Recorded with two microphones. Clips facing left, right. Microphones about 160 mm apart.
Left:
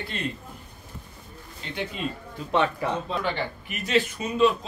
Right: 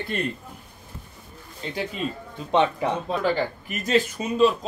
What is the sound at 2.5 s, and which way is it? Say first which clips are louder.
Speech: right 3 dB; 20° right (ahead or behind).